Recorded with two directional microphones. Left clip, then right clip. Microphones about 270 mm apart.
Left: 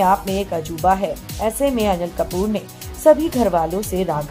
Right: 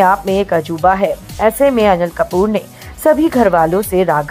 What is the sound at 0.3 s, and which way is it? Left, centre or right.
A woman's voice, centre.